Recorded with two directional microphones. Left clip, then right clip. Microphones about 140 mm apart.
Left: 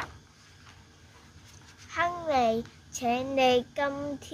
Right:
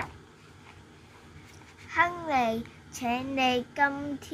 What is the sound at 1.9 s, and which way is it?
A child's voice, 5° left (ahead or behind).